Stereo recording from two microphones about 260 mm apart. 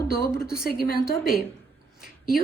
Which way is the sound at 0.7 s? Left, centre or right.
Left.